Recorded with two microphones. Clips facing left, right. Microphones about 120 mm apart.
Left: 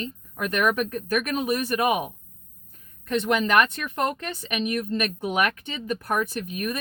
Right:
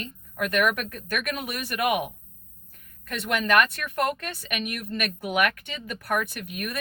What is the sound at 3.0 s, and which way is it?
Speech, 20° left (ahead or behind).